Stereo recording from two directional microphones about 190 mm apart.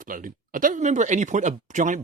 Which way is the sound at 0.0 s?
45° right (ahead or behind).